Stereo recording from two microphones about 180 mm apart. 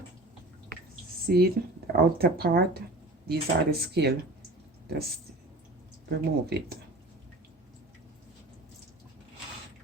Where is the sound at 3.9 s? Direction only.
65° right (ahead or behind).